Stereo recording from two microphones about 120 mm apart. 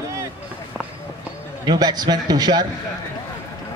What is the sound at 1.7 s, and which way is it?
Speech, 35° right (ahead or behind).